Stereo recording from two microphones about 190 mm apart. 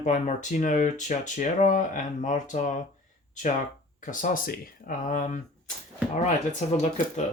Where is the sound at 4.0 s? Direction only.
45° left (ahead or behind).